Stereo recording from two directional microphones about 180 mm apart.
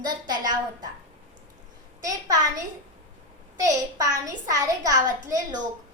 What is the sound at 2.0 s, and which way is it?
Speech, 20° right (ahead or behind).